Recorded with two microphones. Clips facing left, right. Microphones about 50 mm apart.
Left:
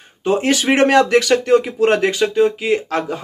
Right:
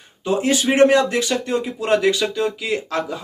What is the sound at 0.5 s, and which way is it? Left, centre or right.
Speech, left.